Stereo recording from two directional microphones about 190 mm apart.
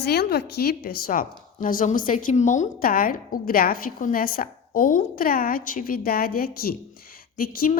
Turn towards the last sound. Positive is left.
turn(degrees=50)  # may be behind; listen again after turning